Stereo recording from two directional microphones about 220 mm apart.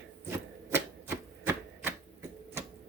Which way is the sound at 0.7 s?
10° right (ahead or behind).